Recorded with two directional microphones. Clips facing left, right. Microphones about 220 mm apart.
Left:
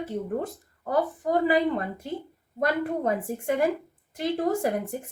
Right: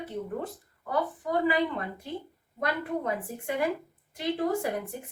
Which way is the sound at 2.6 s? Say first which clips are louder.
Left 5 dB; 45° left (ahead or behind).